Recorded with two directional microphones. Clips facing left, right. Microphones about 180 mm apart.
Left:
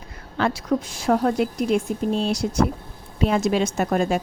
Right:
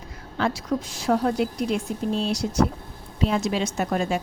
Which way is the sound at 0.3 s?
60° left (ahead or behind).